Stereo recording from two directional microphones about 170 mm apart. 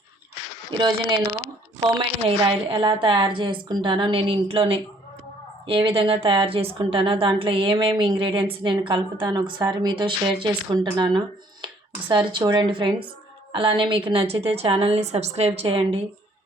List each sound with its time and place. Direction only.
0.8 s speech: 25° right (ahead or behind)
11.6 s a sound: 30° right (ahead or behind)
12.4 s speech: 25° right (ahead or behind)